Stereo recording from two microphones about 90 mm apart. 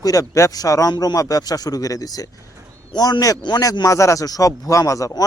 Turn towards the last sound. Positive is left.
turn(degrees=40)  # may be behind; listen again after turning